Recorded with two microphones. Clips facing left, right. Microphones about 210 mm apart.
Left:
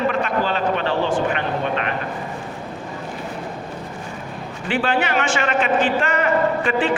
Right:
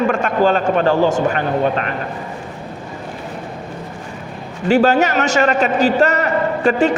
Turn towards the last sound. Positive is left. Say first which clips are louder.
# right 5 dB
turn(degrees=-40)  # may be behind; listen again after turning